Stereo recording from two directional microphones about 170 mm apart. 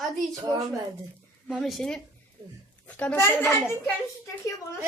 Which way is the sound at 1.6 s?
5° left (ahead or behind).